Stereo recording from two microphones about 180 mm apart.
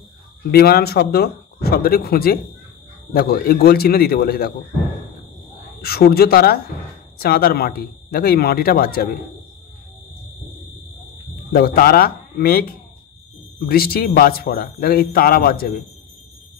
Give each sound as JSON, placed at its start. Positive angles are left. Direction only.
{"t": 0.5, "sound": "a man's voice", "side_deg": 60}
{"t": 5.8, "sound": "a man's voice", "side_deg": 60}
{"t": 11.5, "sound": "a man's voice", "side_deg": 55}